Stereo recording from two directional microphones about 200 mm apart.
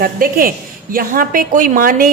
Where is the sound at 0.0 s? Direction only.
45° right (ahead or behind).